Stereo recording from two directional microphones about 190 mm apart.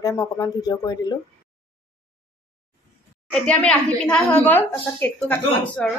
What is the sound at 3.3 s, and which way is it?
A woman's voice, 5° left (ahead or behind).